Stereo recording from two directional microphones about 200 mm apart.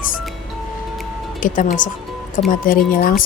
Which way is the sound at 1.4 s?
40° left (ahead or behind).